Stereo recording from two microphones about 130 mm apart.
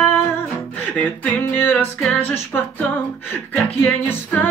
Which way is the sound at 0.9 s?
15° left (ahead or behind).